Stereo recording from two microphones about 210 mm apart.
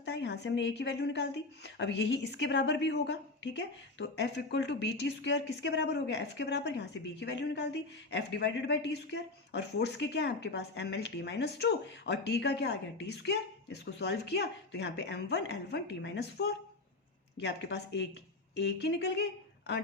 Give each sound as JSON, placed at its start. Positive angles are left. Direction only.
{"t": 0.0, "sound": "a woman's voice", "side_deg": 55}